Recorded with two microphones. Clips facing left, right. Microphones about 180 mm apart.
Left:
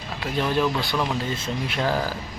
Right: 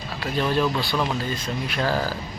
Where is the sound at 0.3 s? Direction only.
15° left (ahead or behind).